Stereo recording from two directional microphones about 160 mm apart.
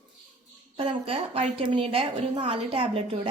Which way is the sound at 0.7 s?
35° right (ahead or behind).